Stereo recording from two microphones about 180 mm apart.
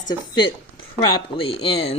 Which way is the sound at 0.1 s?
25° left (ahead or behind).